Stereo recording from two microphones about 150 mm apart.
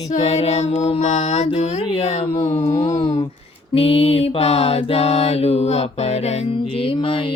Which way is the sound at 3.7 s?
40° left (ahead or behind).